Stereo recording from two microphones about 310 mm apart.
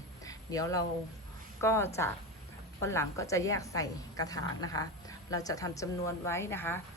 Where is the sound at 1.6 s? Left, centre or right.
Centre.